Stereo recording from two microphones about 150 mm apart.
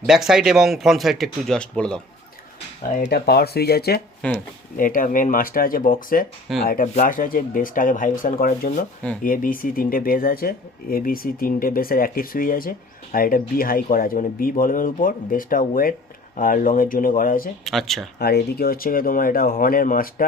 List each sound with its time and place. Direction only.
0.0 s speech: centre (ahead or behind)
2.9 s speech: 70° left (ahead or behind); by 4.0 s 90° left
4.2 s speech: 5° left (ahead or behind)
4.8 s speech: 65° left (ahead or behind)
6.5 s speech: centre (ahead or behind)
6.8 s speech: 55° left (ahead or behind); by 17.5 s 70° left (ahead or behind)
17.7 s speech: centre (ahead or behind)
18.2 s speech: 90° left; by 20.2 s 70° left (ahead or behind)